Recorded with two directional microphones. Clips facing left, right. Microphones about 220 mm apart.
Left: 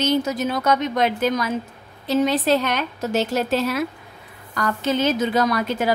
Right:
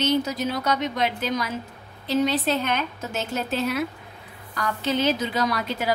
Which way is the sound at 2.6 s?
80° left.